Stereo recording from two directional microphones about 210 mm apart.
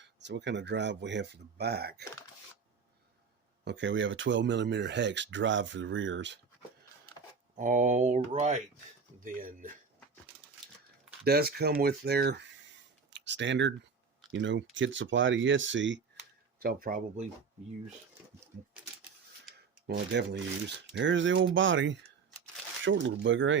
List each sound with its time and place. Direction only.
0.0 s speech: 55° right (ahead or behind)
3.6 s speech: 60° right (ahead or behind)
7.5 s speech: 35° right (ahead or behind)
11.3 s speech: 50° right (ahead or behind)
16.6 s speech: 45° right (ahead or behind)
19.9 s speech: 55° right (ahead or behind)